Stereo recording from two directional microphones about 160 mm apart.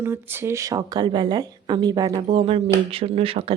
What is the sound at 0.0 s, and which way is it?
Speech, 15° right (ahead or behind).